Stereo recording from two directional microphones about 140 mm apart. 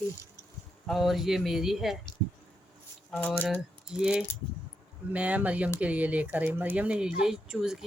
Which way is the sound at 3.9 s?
5° right (ahead or behind).